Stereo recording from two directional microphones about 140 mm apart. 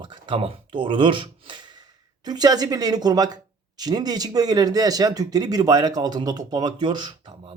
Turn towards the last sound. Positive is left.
turn(degrees=-35)  # may be behind; listen again after turning